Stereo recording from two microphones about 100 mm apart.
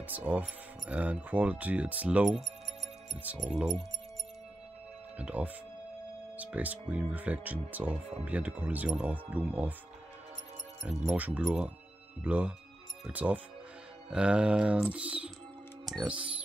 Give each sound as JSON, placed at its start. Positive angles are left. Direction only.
{"t": 0.0, "sound": "speech", "side_deg": -15}
{"t": 3.4, "sound": "speech", "side_deg": -5}
{"t": 5.2, "sound": "speech", "side_deg": -15}
{"t": 10.8, "sound": "speech", "side_deg": 0}
{"t": 11.1, "sound": "speech", "side_deg": -15}
{"t": 11.4, "sound": "speech", "side_deg": 0}
{"t": 12.2, "sound": "speech", "side_deg": -15}